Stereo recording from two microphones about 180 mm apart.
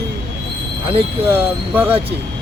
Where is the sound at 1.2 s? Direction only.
10° right (ahead or behind).